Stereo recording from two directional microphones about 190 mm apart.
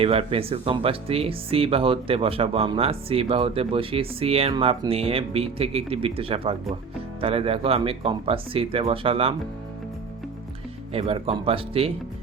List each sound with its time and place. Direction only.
0.0 s speech: 30° right (ahead or behind)
10.9 s speech: 30° right (ahead or behind)